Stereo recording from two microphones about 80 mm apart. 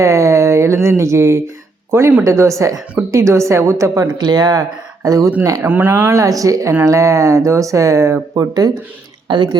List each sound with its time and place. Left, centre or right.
0.0 s a woman's voice: right
4.2 s speech: right
5.6 s speech: right
6.1 s speech: right
9.3 s speech: right